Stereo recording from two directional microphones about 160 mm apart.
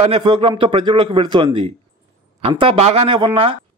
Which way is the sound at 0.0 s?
35° right (ahead or behind).